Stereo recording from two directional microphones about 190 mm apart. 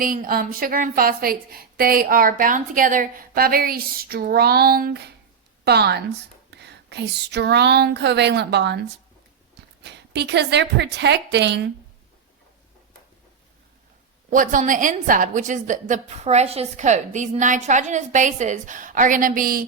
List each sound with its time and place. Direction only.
0.0 s a woman's voice: 45° right (ahead or behind)
9.8 s a woman's voice: 60° right (ahead or behind)
14.3 s a woman's voice: 45° right (ahead or behind)